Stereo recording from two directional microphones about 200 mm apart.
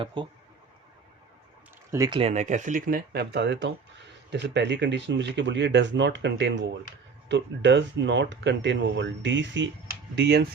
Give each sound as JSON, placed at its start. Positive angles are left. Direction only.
{"t": 0.0, "sound": "speech", "side_deg": -25}
{"t": 1.9, "sound": "speech", "side_deg": -20}